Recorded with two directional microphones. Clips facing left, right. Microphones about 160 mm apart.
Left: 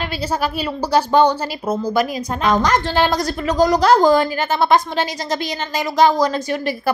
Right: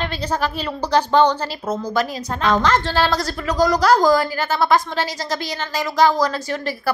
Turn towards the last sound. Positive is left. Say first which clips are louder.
# left 3 dB
turn(degrees=15)  # may be behind; listen again after turning